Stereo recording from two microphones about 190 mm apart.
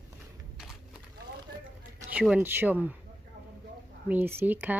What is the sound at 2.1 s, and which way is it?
Speech, 5° right (ahead or behind).